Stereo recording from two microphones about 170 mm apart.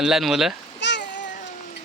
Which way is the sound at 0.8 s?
90° left.